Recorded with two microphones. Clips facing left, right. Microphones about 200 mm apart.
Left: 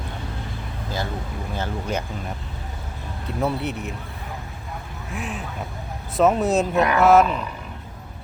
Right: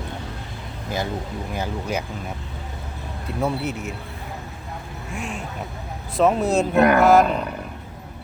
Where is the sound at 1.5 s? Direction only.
10° right (ahead or behind).